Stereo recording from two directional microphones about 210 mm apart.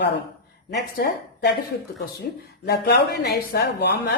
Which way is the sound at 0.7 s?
50° left (ahead or behind).